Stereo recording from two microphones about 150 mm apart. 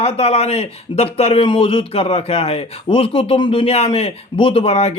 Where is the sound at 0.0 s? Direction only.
45° left (ahead or behind).